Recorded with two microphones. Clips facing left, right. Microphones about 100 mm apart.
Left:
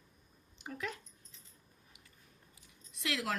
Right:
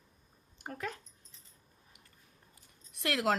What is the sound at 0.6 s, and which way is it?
Speech, 45° right (ahead or behind).